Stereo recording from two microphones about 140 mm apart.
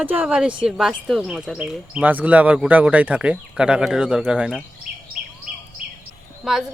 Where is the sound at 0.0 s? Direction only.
10° right (ahead or behind).